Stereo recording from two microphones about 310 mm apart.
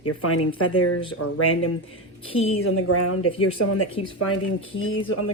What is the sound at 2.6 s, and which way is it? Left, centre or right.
Speech, left.